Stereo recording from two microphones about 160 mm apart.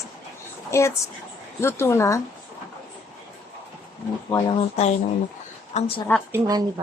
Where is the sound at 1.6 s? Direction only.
15° left (ahead or behind).